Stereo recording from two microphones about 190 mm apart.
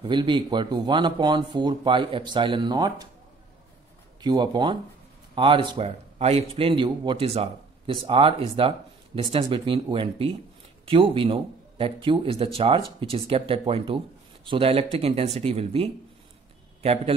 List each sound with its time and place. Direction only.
0.0 s a man's voice: 25° right (ahead or behind)
4.2 s a man's voice: 25° right (ahead or behind)